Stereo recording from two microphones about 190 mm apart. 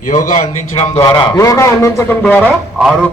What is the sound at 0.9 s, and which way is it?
A man's voice, 15° left (ahead or behind).